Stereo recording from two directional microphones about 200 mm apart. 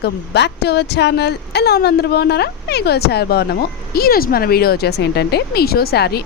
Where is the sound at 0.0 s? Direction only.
55° left (ahead or behind).